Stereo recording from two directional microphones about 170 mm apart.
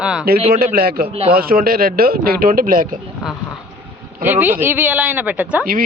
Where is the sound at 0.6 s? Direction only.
65° right (ahead or behind).